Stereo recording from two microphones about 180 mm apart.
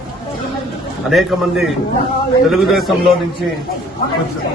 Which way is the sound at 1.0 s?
Centre (ahead or behind).